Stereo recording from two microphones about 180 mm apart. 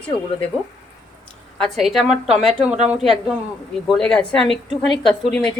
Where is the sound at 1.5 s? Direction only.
Centre (ahead or behind).